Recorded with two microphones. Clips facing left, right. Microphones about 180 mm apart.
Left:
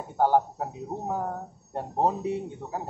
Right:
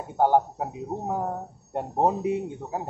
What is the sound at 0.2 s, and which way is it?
Speech, 15° right (ahead or behind).